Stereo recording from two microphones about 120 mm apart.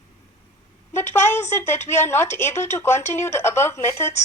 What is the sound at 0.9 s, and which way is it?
Speech, 20° left (ahead or behind).